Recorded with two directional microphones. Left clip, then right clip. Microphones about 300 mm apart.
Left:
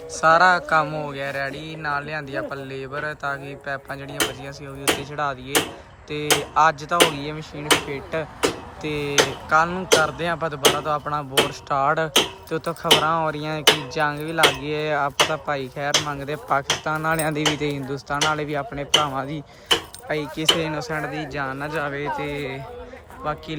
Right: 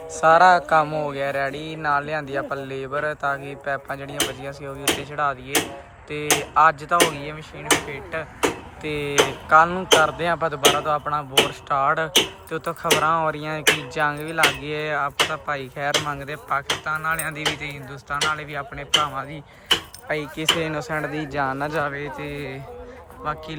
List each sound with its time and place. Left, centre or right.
0.4 s a man's voice: centre
7.9 s a man's voice: centre
12.0 s speech: centre
12.5 s a man's voice: centre